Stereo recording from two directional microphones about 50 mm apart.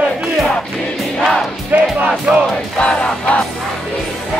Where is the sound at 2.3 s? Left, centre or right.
Centre.